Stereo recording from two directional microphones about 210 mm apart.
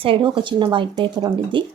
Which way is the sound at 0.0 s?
25° right (ahead or behind).